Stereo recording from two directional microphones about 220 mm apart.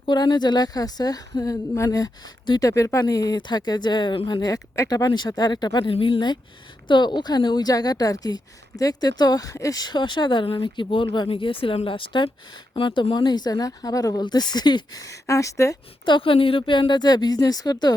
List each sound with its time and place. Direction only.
0.0 s a woman's voice: 20° left (ahead or behind)